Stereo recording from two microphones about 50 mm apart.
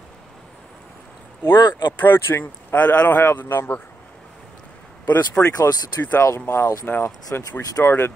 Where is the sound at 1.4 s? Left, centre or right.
Left.